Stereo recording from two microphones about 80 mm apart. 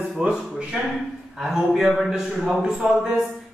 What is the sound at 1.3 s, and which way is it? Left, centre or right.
A man's voice, centre.